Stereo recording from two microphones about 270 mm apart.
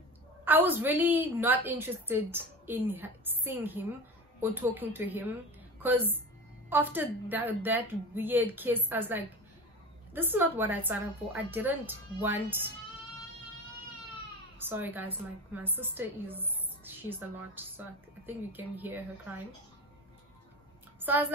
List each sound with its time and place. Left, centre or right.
0.5 s a woman's voice: centre
14.7 s a woman's voice: centre
21.0 s a woman's voice: centre